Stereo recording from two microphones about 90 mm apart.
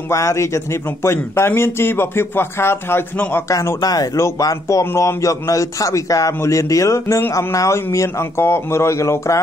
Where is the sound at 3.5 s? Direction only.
40° left (ahead or behind).